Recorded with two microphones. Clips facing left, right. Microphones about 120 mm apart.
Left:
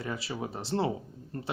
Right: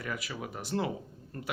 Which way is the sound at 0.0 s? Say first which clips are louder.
Left 3 dB; 30° left (ahead or behind).